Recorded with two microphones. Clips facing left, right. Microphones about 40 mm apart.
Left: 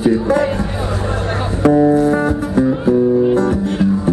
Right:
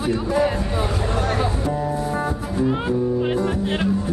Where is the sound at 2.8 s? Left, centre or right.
Right.